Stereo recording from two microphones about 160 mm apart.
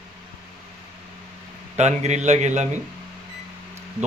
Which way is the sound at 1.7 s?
45° right (ahead or behind).